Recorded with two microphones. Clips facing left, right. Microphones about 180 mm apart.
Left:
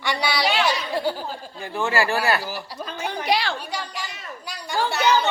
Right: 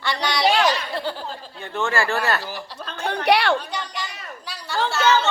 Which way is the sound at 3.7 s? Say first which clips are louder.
Right 1 dB; 10° left (ahead or behind).